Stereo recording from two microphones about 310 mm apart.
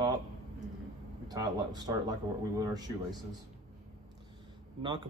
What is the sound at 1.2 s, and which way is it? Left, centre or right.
Speech, centre.